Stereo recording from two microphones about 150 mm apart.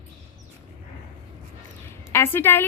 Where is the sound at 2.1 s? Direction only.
15° left (ahead or behind).